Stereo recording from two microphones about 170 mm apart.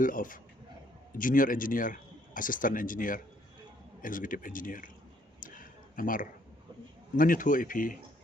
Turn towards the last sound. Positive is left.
turn(degrees=55)  # may be behind; listen again after turning